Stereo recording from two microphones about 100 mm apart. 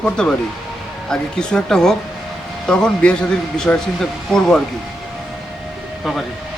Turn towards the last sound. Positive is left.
turn(degrees=0)  # may be behind; listen again after turning